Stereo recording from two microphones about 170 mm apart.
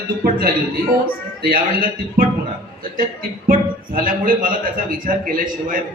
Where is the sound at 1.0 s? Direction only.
60° right (ahead or behind).